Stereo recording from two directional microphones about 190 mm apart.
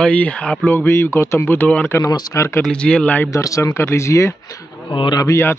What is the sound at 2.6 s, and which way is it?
Speech, 5° left (ahead or behind).